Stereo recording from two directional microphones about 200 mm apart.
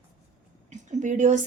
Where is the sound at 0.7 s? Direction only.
35° right (ahead or behind).